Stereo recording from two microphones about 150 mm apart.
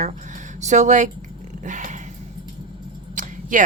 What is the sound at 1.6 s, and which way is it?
Dog, 55° right (ahead or behind).